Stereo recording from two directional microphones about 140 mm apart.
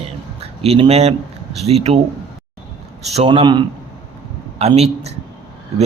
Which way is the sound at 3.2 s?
35° right (ahead or behind).